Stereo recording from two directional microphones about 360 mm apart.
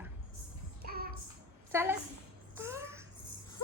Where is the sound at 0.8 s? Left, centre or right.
Right.